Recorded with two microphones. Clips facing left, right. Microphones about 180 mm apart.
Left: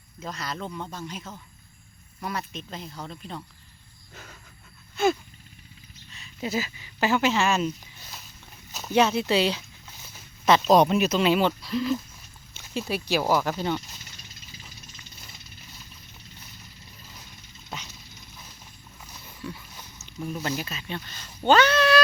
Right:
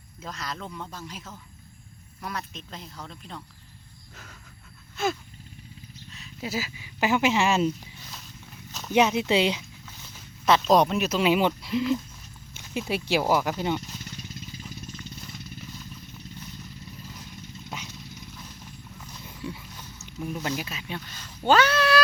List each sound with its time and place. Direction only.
0.2 s speech: centre (ahead or behind)
4.1 s wild animals: centre (ahead or behind)
6.1 s speech: centre (ahead or behind); by 7.7 s 20° right (ahead or behind)
8.9 s speech: 15° right (ahead or behind)
10.0 s a sound: centre (ahead or behind)
11.2 s speech: 15° right (ahead or behind)
17.7 s vehicle: 5° right (ahead or behind)
19.4 s dog: 25° right (ahead or behind)
19.7 s a sound: 15° left (ahead or behind)
20.2 s speech: 10° right (ahead or behind)
21.4 s cat: 5° right (ahead or behind)